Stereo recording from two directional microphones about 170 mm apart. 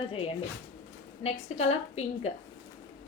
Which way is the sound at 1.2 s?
40° left (ahead or behind).